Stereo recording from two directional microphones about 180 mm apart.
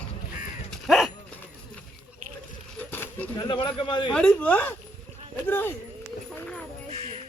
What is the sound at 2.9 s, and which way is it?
Coin, 10° left (ahead or behind).